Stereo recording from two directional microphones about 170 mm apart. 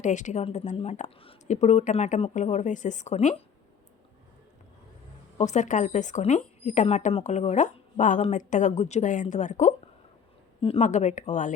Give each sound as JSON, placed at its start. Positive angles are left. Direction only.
{"t": 0.0, "sound": "speech", "side_deg": 45}
{"t": 5.4, "sound": "speech", "side_deg": 45}
{"t": 10.6, "sound": "a woman's voice", "side_deg": 35}
{"t": 10.8, "sound": "speech", "side_deg": 45}